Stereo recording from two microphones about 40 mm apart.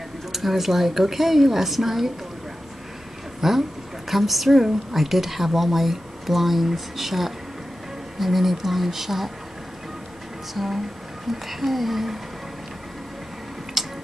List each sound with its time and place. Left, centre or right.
0.3 s a woman's voice: centre
3.3 s a woman's voice: centre
10.5 s a woman's voice: centre
13.8 s tick-tock: centre